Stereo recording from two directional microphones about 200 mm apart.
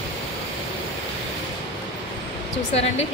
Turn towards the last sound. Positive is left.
turn(degrees=30)  # may be behind; listen again after turning